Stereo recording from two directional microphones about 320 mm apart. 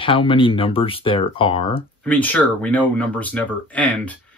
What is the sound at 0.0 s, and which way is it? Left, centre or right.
Speech, centre.